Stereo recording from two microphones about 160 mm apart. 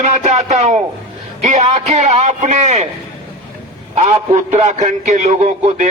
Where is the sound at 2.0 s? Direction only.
45° right (ahead or behind).